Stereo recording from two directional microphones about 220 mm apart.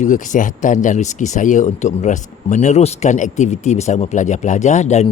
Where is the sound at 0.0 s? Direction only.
35° left (ahead or behind).